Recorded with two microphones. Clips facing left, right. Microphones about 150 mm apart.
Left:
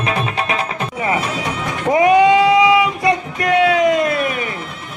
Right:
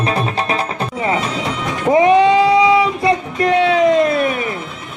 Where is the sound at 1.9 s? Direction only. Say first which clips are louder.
Even; 30° right (ahead or behind).